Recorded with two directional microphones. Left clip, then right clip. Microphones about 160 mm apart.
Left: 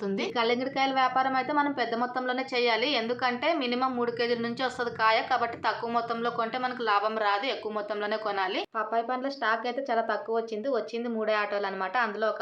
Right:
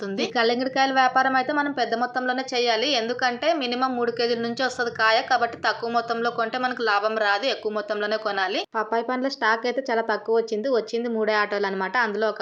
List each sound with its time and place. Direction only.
0.2 s a woman's voice: 30° right (ahead or behind)
8.8 s speech: 35° right (ahead or behind)